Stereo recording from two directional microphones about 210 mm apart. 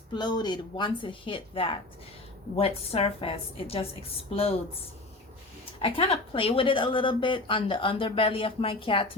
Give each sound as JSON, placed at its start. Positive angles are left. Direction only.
{"t": 0.1, "sound": "speech", "side_deg": 20}
{"t": 5.8, "sound": "speech", "side_deg": 25}